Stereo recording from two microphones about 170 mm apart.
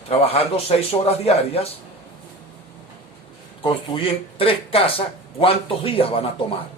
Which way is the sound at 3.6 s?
35° left (ahead or behind).